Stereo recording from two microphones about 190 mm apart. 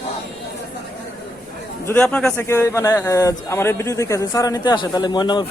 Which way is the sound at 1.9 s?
5° left (ahead or behind).